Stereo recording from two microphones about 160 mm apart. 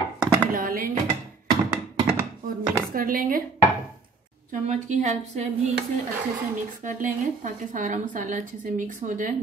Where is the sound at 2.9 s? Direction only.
60° right (ahead or behind).